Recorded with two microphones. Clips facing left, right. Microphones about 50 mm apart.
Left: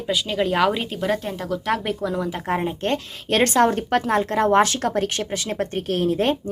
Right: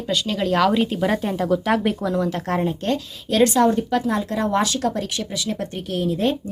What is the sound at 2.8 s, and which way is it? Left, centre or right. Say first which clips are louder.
Speech: even; left.